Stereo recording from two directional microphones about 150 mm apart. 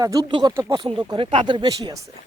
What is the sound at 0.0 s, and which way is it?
Speech, 25° right (ahead or behind).